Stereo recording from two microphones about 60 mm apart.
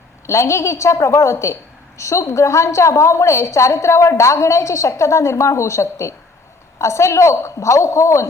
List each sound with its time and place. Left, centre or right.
0.3 s a woman's voice: left